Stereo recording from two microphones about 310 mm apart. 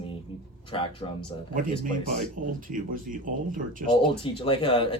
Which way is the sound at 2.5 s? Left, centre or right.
Right.